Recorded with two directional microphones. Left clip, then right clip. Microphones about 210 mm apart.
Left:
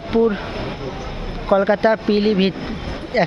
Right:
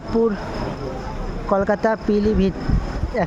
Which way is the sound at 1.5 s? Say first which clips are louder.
Left 4 dB; 5° right (ahead or behind).